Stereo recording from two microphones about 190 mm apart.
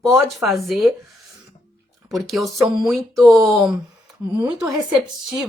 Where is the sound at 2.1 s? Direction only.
Centre (ahead or behind).